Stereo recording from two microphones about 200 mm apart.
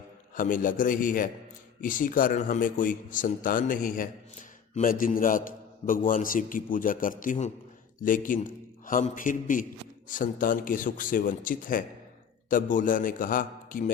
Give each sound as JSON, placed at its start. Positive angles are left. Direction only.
{"t": 0.3, "sound": "a man's voice", "side_deg": 45}